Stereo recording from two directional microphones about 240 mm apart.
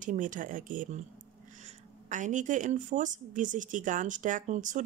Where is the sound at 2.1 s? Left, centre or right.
Right.